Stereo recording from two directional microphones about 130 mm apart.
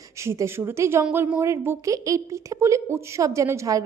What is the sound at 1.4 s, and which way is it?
A woman's voice, 20° right (ahead or behind).